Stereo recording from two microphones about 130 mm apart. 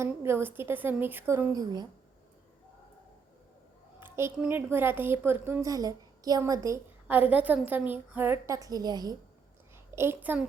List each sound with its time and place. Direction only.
0.0 s a woman's voice: 20° right (ahead or behind)
1.5 s speech: 30° right (ahead or behind)
4.0 s a woman's voice: 15° right (ahead or behind)
7.1 s a woman's voice: 10° right (ahead or behind); by 9.1 s 30° right (ahead or behind)
9.9 s a woman's voice: 20° right (ahead or behind)